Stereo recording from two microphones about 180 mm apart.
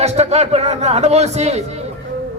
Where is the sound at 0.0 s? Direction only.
35° right (ahead or behind).